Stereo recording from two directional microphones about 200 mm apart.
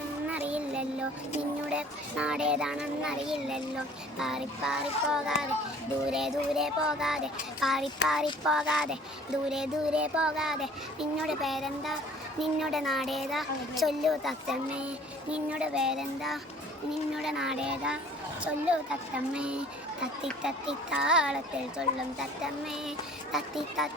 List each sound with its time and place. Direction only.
0.3 s child singing: 5° right (ahead or behind)
1.4 s a child's voice: 5° right (ahead or behind)